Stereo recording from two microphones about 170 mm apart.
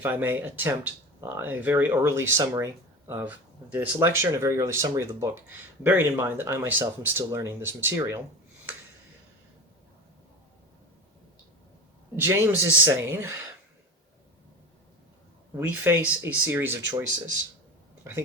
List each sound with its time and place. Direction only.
0.0 s speech: 10° right (ahead or behind)
12.1 s speech: 15° right (ahead or behind)
15.5 s speech: 15° right (ahead or behind)